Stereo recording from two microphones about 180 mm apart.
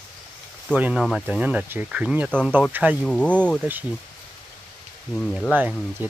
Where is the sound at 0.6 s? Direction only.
5° right (ahead or behind).